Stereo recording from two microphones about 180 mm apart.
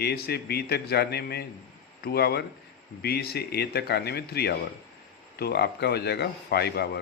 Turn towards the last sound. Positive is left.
turn(degrees=65)  # may be behind; listen again after turning